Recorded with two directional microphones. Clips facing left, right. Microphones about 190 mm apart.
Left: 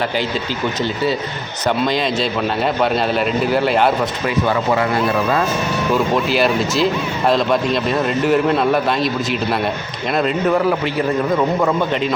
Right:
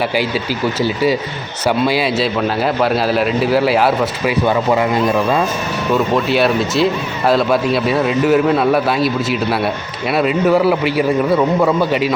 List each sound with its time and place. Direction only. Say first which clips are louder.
1.9 s a man's voice: right 2 dB; 10° right (ahead or behind)
4.4 s a man's voice: right 3 dB; 15° right (ahead or behind)
5.9 s a man's voice: right 3 dB; centre (ahead or behind)
10.2 s a man's voice: right 3 dB; 5° right (ahead or behind)